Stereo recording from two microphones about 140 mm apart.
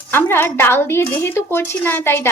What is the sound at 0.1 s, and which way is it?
A woman's voice, 15° left (ahead or behind).